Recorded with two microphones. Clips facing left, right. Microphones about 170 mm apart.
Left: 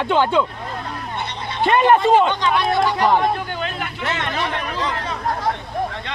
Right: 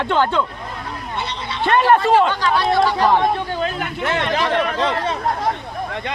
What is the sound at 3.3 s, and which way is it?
Speech, 30° right (ahead or behind).